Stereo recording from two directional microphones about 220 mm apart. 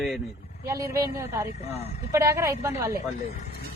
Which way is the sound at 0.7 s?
15° right (ahead or behind).